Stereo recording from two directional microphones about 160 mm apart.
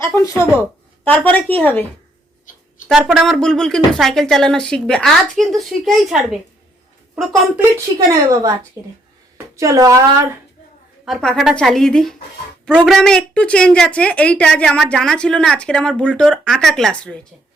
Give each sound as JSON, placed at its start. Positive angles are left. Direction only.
{"t": 0.0, "sound": "a woman's voice", "side_deg": 15}
{"t": 2.9, "sound": "a woman's voice", "side_deg": 0}
{"t": 7.9, "sound": "a woman's voice", "side_deg": -20}
{"t": 11.0, "sound": "a woman's voice", "side_deg": 0}